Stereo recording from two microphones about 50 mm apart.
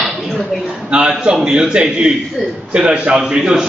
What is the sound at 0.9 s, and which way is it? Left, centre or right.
A man's voice, centre.